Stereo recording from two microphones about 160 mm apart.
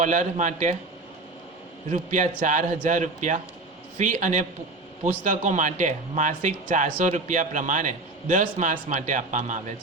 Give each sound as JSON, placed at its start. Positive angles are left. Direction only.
{"t": 0.0, "sound": "speech", "side_deg": -50}
{"t": 1.9, "sound": "speech", "side_deg": -50}